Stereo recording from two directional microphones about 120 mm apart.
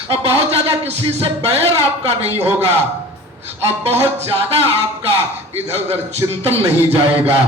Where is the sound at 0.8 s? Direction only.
60° right (ahead or behind).